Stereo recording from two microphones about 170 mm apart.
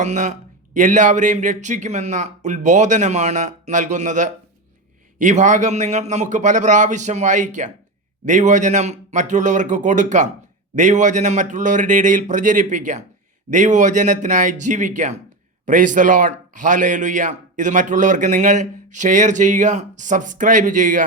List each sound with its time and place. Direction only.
0.0 s a man's voice: 45° right (ahead or behind)